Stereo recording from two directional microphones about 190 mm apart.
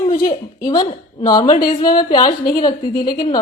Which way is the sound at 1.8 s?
20° left (ahead or behind).